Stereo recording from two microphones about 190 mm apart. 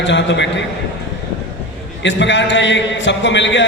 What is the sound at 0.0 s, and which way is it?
Speech, 70° left (ahead or behind).